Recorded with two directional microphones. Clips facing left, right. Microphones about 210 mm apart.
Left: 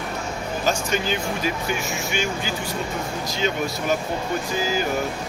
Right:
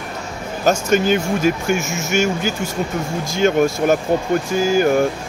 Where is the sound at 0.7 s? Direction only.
45° right (ahead or behind).